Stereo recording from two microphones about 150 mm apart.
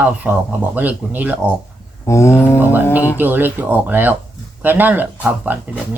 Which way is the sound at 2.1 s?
20° left (ahead or behind).